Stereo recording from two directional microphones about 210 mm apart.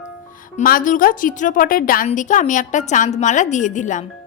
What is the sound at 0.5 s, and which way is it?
A woman's voice, 40° left (ahead or behind).